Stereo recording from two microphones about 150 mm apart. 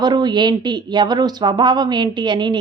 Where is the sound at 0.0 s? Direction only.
30° right (ahead or behind).